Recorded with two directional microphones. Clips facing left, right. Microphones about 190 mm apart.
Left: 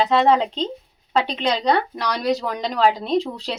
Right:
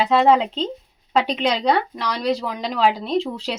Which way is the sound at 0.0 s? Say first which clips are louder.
Right 1 dB; 5° right (ahead or behind).